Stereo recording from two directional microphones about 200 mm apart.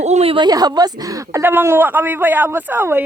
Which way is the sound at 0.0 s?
30° right (ahead or behind).